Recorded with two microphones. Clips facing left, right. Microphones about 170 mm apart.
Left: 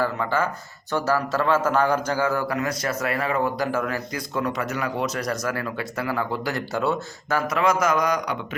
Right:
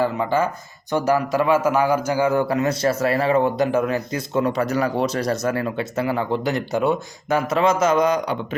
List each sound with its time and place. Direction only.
0.0 s speech: 15° right (ahead or behind)